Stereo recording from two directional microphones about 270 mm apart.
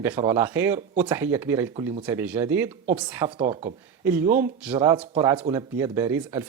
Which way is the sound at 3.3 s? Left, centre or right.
Right.